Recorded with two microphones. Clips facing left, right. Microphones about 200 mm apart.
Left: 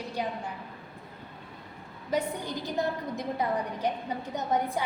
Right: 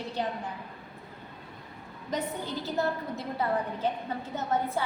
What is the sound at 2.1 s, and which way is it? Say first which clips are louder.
A woman's voice: left 2 dB; 15° left (ahead or behind).